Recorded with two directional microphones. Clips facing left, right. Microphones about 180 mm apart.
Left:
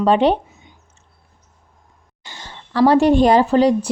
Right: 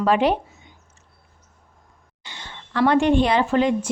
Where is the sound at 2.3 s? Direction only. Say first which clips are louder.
Left 2 dB; 40° left (ahead or behind).